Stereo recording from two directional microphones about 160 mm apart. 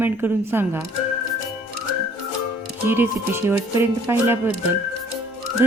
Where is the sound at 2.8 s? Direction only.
15° right (ahead or behind).